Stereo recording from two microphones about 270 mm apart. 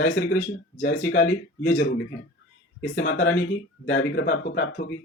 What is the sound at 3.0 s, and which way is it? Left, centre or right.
Speech, left.